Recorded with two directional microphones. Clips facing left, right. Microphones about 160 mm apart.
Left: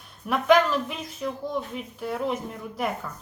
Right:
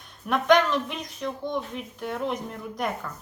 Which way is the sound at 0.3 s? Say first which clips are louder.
Left 1 dB; 5° left (ahead or behind).